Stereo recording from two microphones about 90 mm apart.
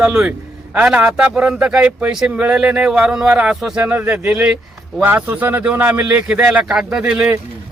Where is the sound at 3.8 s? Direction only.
20° right (ahead or behind).